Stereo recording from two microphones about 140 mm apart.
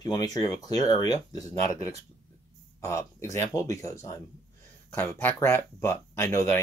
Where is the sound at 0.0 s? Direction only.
30° left (ahead or behind).